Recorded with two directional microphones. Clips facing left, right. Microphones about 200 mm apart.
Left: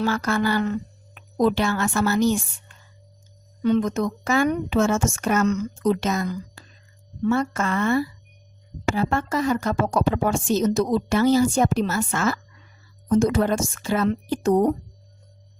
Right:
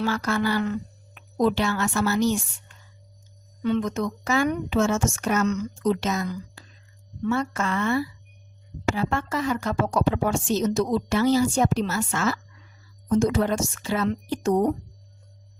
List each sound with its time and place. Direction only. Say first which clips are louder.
0.0 s speech: left 2 dB; 50° left (ahead or behind)
3.6 s speech: left 3 dB; 45° left (ahead or behind)